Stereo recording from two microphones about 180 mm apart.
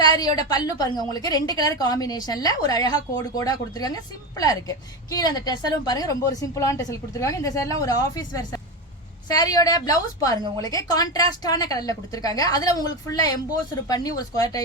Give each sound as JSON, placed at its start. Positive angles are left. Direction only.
{"t": 0.0, "sound": "a woman's voice", "side_deg": 20}